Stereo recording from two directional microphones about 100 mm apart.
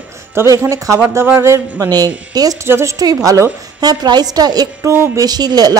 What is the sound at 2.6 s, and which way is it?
Speech, 25° right (ahead or behind).